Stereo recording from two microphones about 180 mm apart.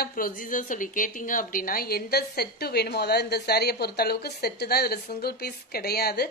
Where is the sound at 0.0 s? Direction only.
50° left (ahead or behind).